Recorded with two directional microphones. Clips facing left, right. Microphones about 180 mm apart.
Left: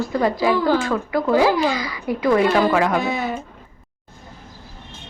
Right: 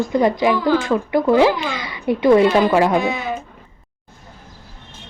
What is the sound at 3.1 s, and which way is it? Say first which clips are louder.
Speech: even; 50° left (ahead or behind).